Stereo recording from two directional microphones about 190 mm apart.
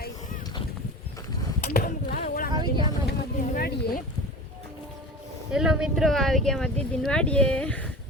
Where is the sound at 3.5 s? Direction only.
50° left (ahead or behind).